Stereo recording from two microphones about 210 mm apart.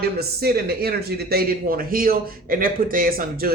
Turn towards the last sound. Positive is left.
turn(degrees=-45)  # may be behind; listen again after turning